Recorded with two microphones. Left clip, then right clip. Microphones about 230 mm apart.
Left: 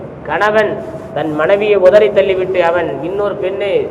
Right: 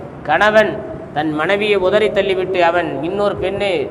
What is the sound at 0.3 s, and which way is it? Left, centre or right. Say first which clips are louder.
A man's voice: even; right.